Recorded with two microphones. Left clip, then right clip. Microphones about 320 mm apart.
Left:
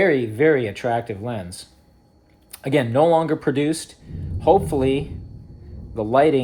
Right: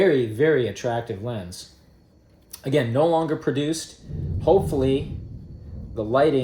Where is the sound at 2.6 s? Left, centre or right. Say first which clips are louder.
Left 3 dB; centre.